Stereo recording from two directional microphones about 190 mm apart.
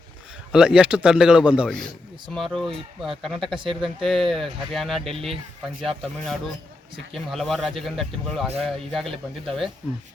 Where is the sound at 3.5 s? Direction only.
25° right (ahead or behind).